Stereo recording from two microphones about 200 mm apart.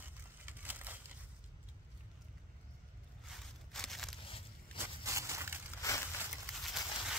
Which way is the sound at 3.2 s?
Centre (ahead or behind).